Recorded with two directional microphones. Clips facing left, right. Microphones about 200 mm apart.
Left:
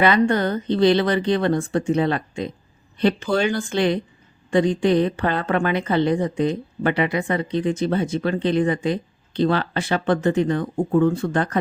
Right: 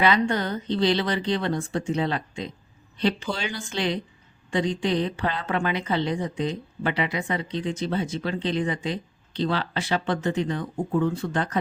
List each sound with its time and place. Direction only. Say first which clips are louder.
0.0 s a woman's voice: left 5 dB; 55° left (ahead or behind)